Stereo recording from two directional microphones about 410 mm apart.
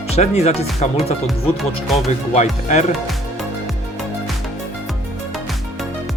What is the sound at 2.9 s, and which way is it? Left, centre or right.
Music, centre.